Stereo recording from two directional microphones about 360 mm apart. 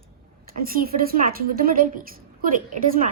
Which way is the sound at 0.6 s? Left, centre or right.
Right.